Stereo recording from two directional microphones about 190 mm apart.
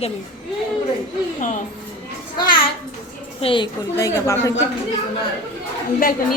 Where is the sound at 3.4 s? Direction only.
25° left (ahead or behind).